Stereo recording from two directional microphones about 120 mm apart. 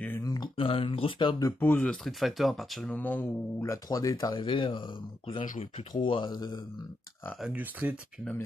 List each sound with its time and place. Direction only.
0.2 s a sound: 30° left (ahead or behind)
0.6 s speech: 50° left (ahead or behind)
1.6 s speech: 15° left (ahead or behind)
2.0 s speech: centre (ahead or behind); by 6.6 s 35° left (ahead or behind)
7.8 s speech: 15° right (ahead or behind)